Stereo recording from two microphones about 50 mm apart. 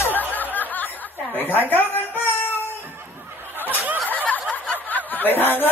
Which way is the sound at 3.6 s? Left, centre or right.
Right.